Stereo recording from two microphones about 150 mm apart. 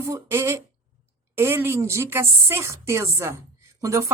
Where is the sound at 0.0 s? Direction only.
20° right (ahead or behind).